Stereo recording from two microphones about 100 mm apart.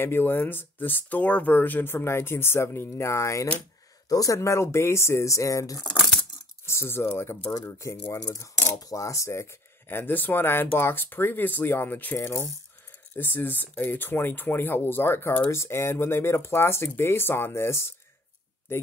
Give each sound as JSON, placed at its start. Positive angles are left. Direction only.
{"t": 0.0, "sound": "speech", "side_deg": 20}
{"t": 12.2, "sound": "speech", "side_deg": 30}